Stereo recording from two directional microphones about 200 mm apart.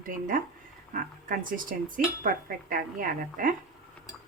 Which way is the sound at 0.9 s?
45° right (ahead or behind).